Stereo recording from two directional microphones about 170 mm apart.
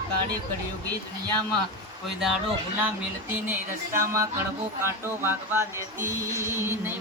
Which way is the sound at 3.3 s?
15° right (ahead or behind).